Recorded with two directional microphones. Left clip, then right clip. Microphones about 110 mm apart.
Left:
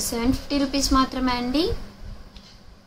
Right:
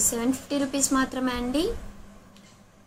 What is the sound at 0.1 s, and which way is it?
A woman's voice, 5° left (ahead or behind).